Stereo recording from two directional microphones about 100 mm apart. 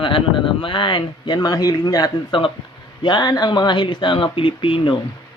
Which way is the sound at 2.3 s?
60° left (ahead or behind).